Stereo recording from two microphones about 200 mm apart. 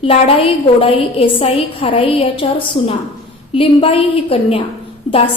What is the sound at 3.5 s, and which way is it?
A woman's voice, 30° left (ahead or behind).